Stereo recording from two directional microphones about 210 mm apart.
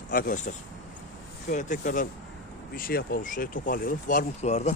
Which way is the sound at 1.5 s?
35° left (ahead or behind).